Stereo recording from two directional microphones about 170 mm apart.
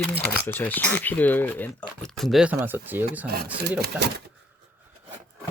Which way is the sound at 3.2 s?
65° right (ahead or behind).